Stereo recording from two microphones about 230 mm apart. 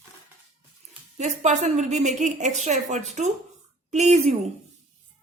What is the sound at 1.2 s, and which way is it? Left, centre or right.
A woman's voice, right.